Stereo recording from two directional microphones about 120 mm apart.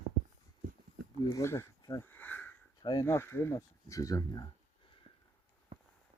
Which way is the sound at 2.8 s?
30° left (ahead or behind).